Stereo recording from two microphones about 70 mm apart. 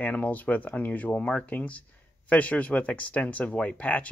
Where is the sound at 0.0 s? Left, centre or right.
Left.